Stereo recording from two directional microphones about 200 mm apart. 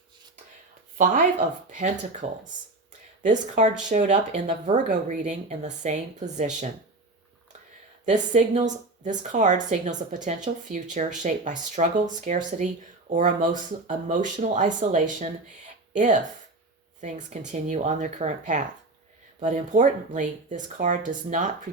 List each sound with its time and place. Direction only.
0.9 s a woman's voice: 40° right (ahead or behind)
8.0 s a woman's voice: 40° right (ahead or behind)